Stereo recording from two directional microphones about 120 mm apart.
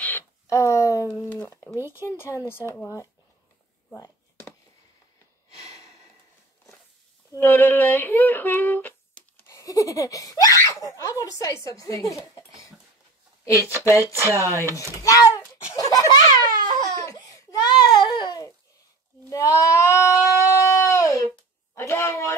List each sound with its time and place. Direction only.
0.0 s a sound: 20° left (ahead or behind)
1.5 s speech: 20° left (ahead or behind)
3.9 s a sound: 20° left (ahead or behind)
7.3 s speech: 15° left (ahead or behind)
9.5 s speech: 25° left (ahead or behind)
14.1 s speech: 20° right (ahead or behind)
15.0 s a child's voice: 30° left (ahead or behind)
16.8 s baby cry: 30° left (ahead or behind)
19.2 s speech: 25° left (ahead or behind)
20.3 s a sound: 25° left (ahead or behind)
21.7 s speech: 20° left (ahead or behind)